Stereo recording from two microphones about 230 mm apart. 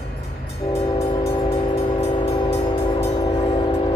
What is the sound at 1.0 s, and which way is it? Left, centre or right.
Train, centre.